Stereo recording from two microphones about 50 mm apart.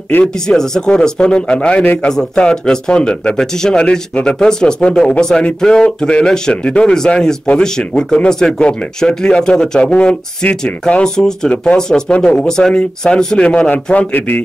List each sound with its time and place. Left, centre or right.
0.2 s speech: centre
13.9 s speech: left